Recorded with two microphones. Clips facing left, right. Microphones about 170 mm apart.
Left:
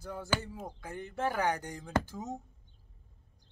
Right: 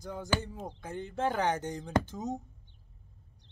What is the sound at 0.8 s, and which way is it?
Speech, 20° right (ahead or behind).